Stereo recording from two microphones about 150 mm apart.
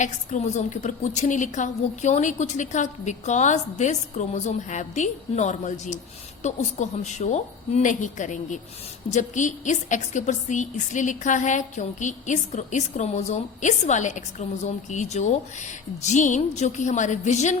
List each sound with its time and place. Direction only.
0.0 s a woman's voice: 55° left (ahead or behind)